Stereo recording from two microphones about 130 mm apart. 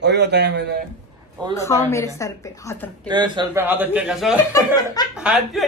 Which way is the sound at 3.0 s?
35° right (ahead or behind).